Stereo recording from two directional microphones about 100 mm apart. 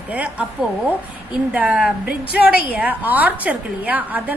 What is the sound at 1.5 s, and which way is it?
A woman's voice, 15° right (ahead or behind).